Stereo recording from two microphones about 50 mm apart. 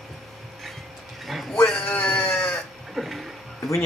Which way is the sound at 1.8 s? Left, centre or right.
Left.